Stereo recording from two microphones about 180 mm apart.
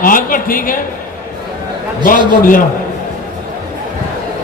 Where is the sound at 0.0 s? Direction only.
50° left (ahead or behind).